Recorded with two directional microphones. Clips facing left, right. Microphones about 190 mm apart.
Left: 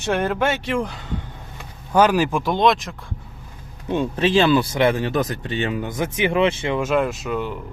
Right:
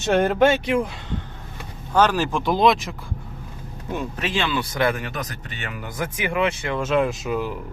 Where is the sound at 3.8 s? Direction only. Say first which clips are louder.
Left 7 dB; 30° left (ahead or behind).